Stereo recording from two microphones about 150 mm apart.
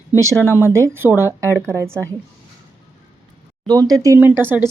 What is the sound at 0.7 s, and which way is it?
Speech, 15° right (ahead or behind).